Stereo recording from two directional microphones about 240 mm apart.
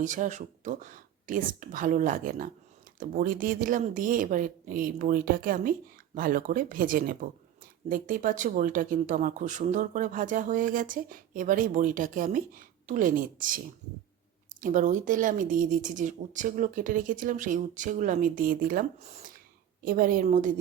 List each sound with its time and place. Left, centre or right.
0.0 s speech: right